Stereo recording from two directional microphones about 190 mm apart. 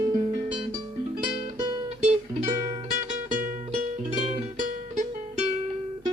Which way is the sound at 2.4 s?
35° right (ahead or behind).